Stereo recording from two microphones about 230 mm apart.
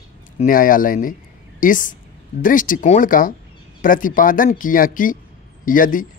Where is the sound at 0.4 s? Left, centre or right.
Left.